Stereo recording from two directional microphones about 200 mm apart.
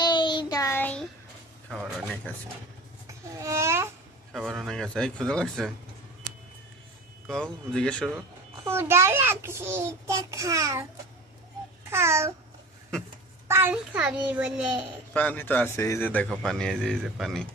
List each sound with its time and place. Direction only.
0.0 s child singing: 20° left (ahead or behind)
1.7 s speech: centre (ahead or behind)
3.1 s babbling: 15° right (ahead or behind)
4.3 s speech: centre (ahead or behind)
7.2 s speech: 5° left (ahead or behind)
8.6 s a child's voice: 10° right (ahead or behind)
11.9 s a child's voice: 15° right (ahead or behind)
13.5 s a child's voice: 10° right (ahead or behind)
15.1 s a man's voice: 10° left (ahead or behind)